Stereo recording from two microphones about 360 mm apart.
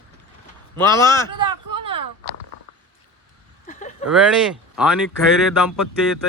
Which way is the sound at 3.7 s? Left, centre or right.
Left.